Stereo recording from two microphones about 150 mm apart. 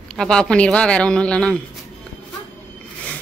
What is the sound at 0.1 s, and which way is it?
A woman's voice, 5° left (ahead or behind).